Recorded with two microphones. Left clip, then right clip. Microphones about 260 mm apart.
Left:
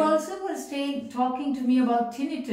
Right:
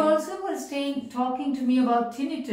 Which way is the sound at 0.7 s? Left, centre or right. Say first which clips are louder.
Right 1 dB; centre.